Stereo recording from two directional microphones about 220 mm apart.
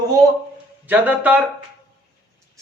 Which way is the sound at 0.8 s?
5° right (ahead or behind).